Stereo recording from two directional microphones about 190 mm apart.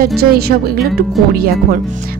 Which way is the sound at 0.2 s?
55° right (ahead or behind).